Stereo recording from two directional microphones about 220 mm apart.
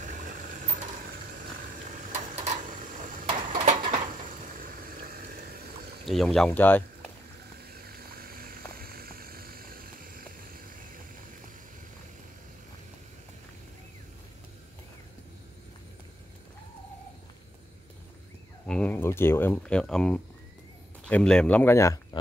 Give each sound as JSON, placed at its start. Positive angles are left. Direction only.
{"t": 1.9, "sound": "a sound", "side_deg": -30}
{"t": 4.6, "sound": "water", "side_deg": -40}
{"t": 6.0, "sound": "speech", "side_deg": 0}
{"t": 7.8, "sound": "vehicle", "side_deg": -45}
{"t": 18.7, "sound": "a sound", "side_deg": 5}
{"t": 21.0, "sound": "speech", "side_deg": 5}